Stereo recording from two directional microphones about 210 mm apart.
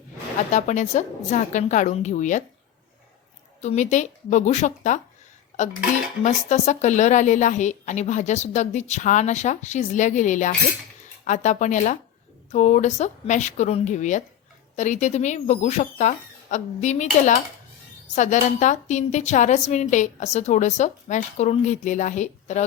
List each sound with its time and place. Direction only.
0.5 s a woman's voice: 35° left (ahead or behind)
3.6 s a woman's voice: 35° left (ahead or behind)
6.2 s a woman's voice: 35° left (ahead or behind)